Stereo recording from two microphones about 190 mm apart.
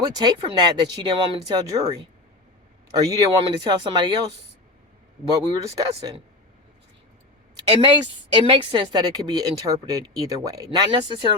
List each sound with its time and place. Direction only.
0.0 s speech: 20° right (ahead or behind)
3.1 s speech: 20° right (ahead or behind)
5.3 s speech: 20° right (ahead or behind)
7.5 s speech: 25° right (ahead or behind)